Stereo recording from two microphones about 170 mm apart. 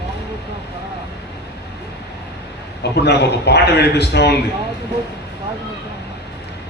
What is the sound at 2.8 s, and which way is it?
A man's voice, 75° left (ahead or behind).